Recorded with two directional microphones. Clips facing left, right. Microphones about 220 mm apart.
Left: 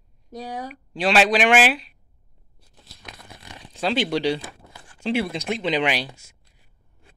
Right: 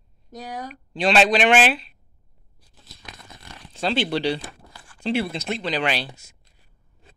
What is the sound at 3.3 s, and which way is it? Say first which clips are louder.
Crumpling: left 1 dB; 15° left (ahead or behind).